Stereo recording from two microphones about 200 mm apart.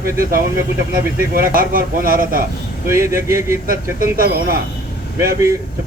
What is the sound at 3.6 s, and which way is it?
Speech, 45° right (ahead or behind).